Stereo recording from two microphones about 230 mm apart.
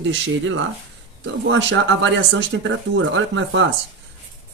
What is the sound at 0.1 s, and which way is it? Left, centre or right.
Speech, right.